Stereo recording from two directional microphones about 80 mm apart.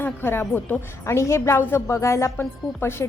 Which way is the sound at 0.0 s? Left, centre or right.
Left.